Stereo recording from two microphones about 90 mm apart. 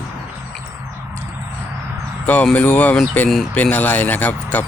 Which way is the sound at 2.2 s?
15° left (ahead or behind).